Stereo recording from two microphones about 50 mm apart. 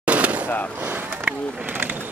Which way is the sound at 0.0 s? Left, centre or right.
Right.